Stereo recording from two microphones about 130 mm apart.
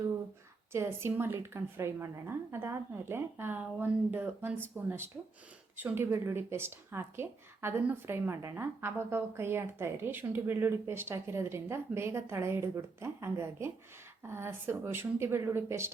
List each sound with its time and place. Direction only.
0.7 s a woman's voice: 20° right (ahead or behind)